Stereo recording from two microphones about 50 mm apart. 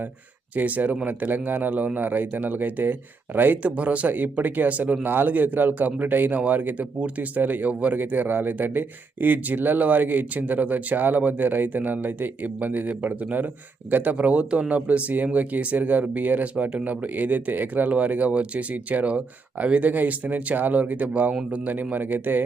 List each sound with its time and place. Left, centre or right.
0.5 s speech: right